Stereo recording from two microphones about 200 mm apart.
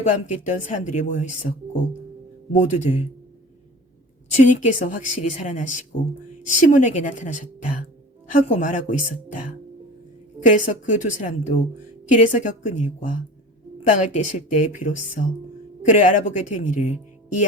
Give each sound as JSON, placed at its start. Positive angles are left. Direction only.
{"t": 0.0, "sound": "speech", "side_deg": 40}
{"t": 2.6, "sound": "speech", "side_deg": 35}
{"t": 4.3, "sound": "speech", "side_deg": 40}
{"t": 10.7, "sound": "speech", "side_deg": 40}